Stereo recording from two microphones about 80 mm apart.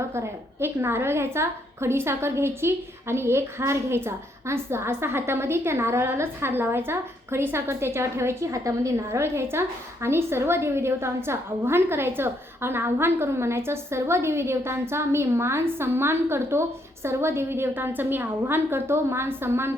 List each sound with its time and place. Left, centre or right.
0.1 s a woman's voice: right